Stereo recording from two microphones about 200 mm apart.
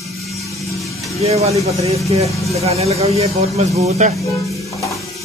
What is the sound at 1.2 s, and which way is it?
Speech, 30° right (ahead or behind).